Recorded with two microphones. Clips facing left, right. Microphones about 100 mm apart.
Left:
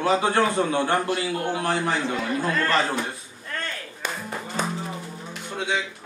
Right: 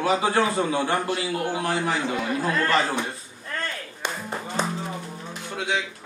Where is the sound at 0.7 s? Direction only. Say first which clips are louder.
Left 1 dB; 30° left (ahead or behind).